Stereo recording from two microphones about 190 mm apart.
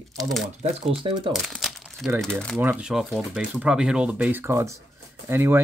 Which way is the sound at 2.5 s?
10° right (ahead or behind).